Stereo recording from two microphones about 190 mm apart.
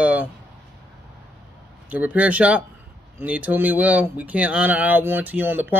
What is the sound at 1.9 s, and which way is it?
Speech, 5° right (ahead or behind).